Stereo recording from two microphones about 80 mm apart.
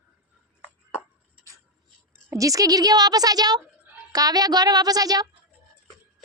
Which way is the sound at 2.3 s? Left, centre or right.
Right.